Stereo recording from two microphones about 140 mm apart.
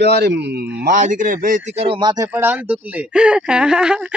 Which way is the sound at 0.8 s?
65° right (ahead or behind).